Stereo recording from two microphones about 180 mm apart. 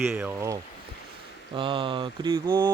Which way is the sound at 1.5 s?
30° right (ahead or behind).